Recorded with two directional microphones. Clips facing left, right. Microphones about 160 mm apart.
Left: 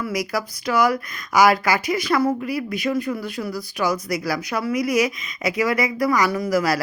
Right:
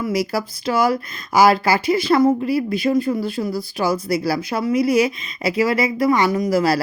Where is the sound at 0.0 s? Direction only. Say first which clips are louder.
Right 4 dB; 30° right (ahead or behind).